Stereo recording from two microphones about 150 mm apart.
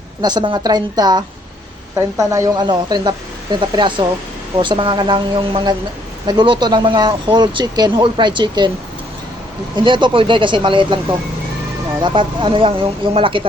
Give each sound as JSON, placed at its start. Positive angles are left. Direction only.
{"t": 0.2, "sound": "speech", "side_deg": -30}
{"t": 9.7, "sound": "speech", "side_deg": -30}
{"t": 12.0, "sound": "speech", "side_deg": -30}